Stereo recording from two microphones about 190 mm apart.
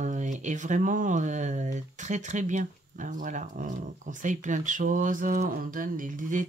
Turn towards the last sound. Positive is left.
turn(degrees=-45)  # may be behind; listen again after turning